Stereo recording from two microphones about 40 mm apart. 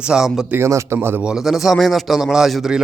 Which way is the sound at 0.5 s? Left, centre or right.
Right.